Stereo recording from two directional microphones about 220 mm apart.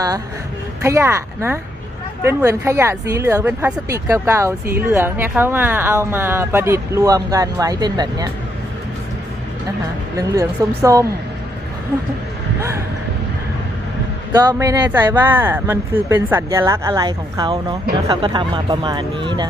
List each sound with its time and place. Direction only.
0.8 s speech: 10° right (ahead or behind)
10.6 s speech: 15° right (ahead or behind)
14.3 s speech: 15° right (ahead or behind)